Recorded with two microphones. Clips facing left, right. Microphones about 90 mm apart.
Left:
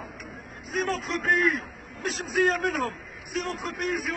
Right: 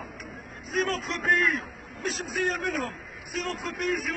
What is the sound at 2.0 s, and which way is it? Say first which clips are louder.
Speech: left 4 dB; 55° left (ahead or behind).